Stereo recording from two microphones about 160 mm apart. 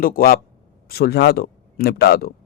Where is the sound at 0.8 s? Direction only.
85° left.